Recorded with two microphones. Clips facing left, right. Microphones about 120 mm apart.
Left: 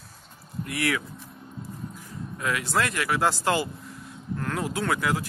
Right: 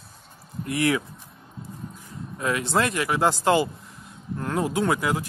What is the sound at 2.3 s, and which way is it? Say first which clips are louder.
A man's voice: right 3 dB; 25° right (ahead or behind).